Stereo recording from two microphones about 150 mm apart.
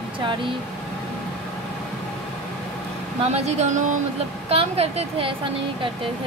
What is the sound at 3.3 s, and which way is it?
Speech, 45° right (ahead or behind).